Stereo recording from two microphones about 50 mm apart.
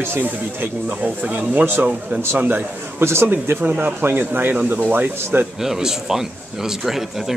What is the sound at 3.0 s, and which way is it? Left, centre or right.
Speech, right.